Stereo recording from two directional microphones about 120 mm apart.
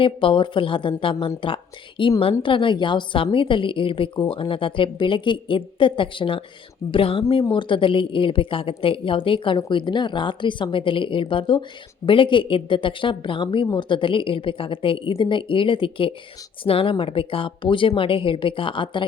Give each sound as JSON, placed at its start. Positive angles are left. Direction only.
{"t": 0.0, "sound": "a woman's voice", "side_deg": 45}